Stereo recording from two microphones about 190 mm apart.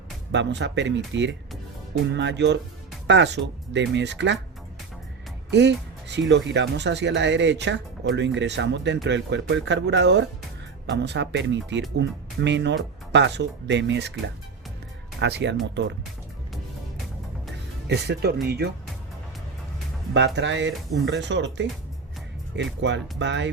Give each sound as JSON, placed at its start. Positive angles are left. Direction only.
{"t": 0.3, "sound": "speech", "side_deg": -65}
{"t": 5.5, "sound": "speech", "side_deg": -65}
{"t": 15.2, "sound": "speech", "side_deg": -65}
{"t": 17.8, "sound": "speech", "side_deg": -60}
{"t": 20.1, "sound": "speech", "side_deg": -70}